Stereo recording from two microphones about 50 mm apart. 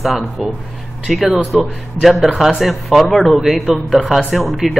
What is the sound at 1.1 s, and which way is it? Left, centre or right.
Speech, centre.